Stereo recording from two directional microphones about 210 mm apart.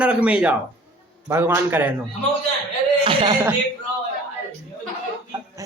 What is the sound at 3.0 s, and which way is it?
Speech, 25° right (ahead or behind).